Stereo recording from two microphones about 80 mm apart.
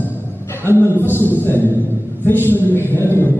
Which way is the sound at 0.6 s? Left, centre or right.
Left.